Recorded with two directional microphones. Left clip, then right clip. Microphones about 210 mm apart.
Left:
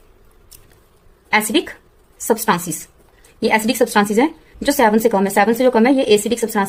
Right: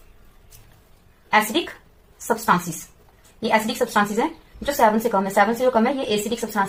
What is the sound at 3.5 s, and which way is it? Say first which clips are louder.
A woman's voice: left 4 dB; 45° left (ahead or behind).